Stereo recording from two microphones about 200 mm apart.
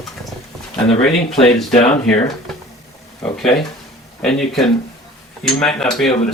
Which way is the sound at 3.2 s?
Centre (ahead or behind).